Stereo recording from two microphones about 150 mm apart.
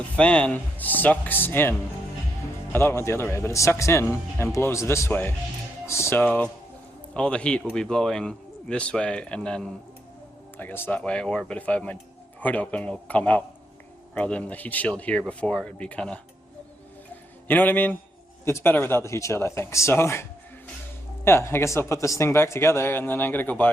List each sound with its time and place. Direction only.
0.2 s speech: 5° left (ahead or behind)
2.7 s a man's voice: 15° left (ahead or behind)
17.5 s speech: 10° left (ahead or behind)
21.2 s speech: 15° left (ahead or behind)